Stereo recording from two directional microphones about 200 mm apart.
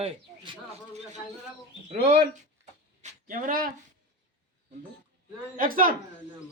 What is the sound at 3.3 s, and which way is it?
Speech, 45° right (ahead or behind).